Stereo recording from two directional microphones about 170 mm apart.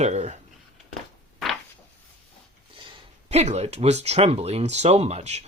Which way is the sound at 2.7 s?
35° right (ahead or behind).